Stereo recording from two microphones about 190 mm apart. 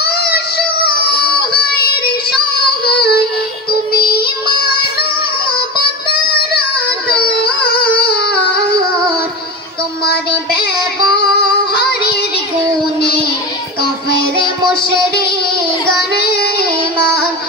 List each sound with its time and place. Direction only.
2.8 s child singing: 55° left (ahead or behind)
10.0 s child singing: 55° left (ahead or behind)
13.0 s music: 55° left (ahead or behind)
14.8 s music: 55° left (ahead or behind)
16.4 s child singing: 55° left (ahead or behind)